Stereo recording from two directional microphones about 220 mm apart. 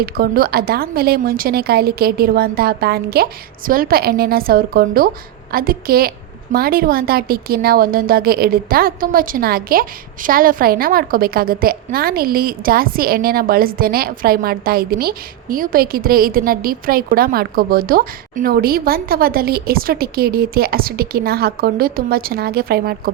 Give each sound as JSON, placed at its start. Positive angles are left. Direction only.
{"t": 0.0, "sound": "a woman's voice", "side_deg": -45}